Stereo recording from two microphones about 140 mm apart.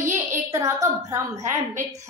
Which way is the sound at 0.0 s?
20° right (ahead or behind).